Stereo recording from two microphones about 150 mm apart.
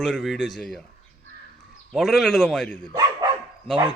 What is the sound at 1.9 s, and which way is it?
Speech, centre (ahead or behind).